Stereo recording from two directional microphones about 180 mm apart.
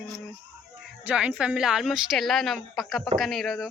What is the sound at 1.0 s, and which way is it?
Speech, 5° right (ahead or behind).